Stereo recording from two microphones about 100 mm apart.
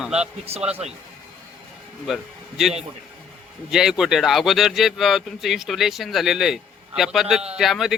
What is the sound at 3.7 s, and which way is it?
Speech, 5° right (ahead or behind).